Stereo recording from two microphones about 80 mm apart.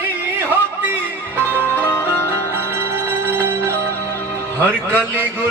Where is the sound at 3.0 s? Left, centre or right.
Right.